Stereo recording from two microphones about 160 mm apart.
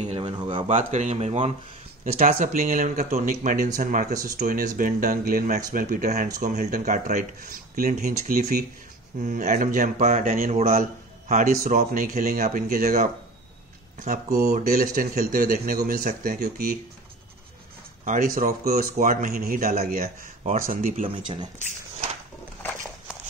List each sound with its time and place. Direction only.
0.1 s a sound: 30° right (ahead or behind)
0.7 s speech: 45° right (ahead or behind)
2.1 s speech: 55° right (ahead or behind)
10.2 s speech: 60° right (ahead or behind)
10.5 s speech: 40° right (ahead or behind)
10.8 s a sound: 50° right (ahead or behind)
11.9 s speech: 65° right (ahead or behind)
18.0 s speech: 60° right (ahead or behind)
20.4 s speech: 55° right (ahead or behind)
21.0 s speech: 30° right (ahead or behind)